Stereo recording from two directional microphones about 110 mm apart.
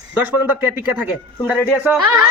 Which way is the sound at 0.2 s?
15° right (ahead or behind).